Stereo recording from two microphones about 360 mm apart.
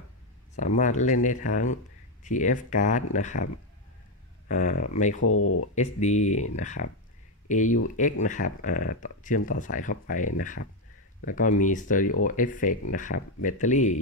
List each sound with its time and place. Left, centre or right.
0.6 s speech: centre
4.5 s speech: centre
5.2 s speech: left
5.8 s speech: centre